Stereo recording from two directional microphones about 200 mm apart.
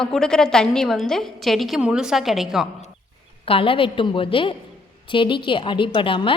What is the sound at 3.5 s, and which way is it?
A woman's voice, 25° left (ahead or behind).